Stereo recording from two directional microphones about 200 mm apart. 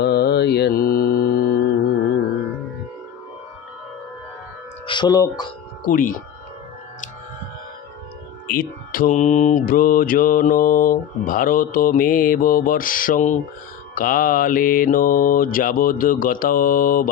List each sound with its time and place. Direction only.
0.0 s mantra: 55° left (ahead or behind)
4.9 s speech: 20° left (ahead or behind)
5.8 s mantra: 45° left (ahead or behind)
8.4 s mantra: 45° left (ahead or behind)